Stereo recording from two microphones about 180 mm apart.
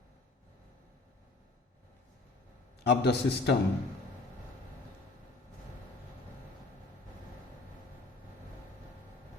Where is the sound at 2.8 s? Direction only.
65° left (ahead or behind).